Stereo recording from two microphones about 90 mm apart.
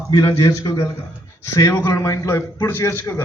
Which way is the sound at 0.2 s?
40° left (ahead or behind).